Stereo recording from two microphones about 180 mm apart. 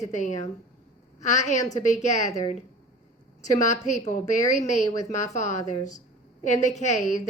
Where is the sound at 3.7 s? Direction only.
40° left (ahead or behind).